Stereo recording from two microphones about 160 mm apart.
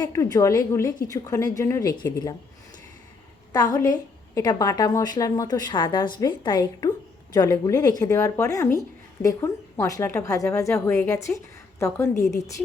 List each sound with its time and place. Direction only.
0.0 s a woman's voice: 20° left (ahead or behind)
3.5 s a woman's voice: 25° left (ahead or behind)